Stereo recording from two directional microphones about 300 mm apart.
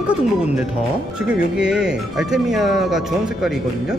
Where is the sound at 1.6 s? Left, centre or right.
Centre.